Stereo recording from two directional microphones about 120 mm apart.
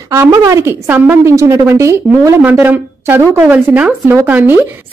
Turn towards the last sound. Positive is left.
turn(degrees=-15)  # may be behind; listen again after turning